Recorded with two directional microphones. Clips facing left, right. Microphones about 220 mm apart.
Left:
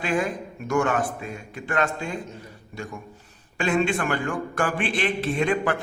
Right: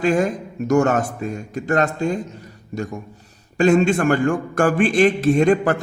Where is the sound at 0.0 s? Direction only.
40° right (ahead or behind).